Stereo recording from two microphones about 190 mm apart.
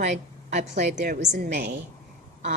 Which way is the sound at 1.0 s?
55° right (ahead or behind).